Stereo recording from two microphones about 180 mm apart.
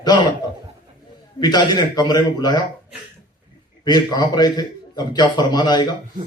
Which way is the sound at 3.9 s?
20° left (ahead or behind).